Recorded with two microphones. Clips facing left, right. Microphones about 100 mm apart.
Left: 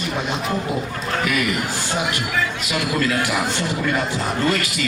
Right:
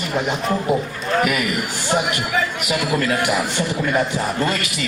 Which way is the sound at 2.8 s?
20° right (ahead or behind).